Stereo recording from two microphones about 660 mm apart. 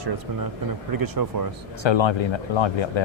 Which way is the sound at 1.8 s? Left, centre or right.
Left.